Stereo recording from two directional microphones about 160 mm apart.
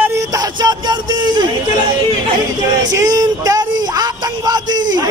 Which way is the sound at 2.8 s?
20° right (ahead or behind).